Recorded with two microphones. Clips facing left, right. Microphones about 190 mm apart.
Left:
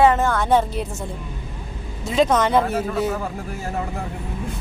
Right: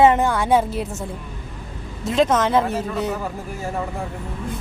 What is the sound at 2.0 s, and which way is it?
Speech, centre (ahead or behind).